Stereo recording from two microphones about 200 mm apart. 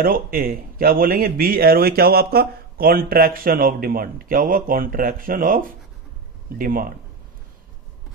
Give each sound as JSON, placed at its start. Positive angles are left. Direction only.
{"t": 0.0, "sound": "speech", "side_deg": -45}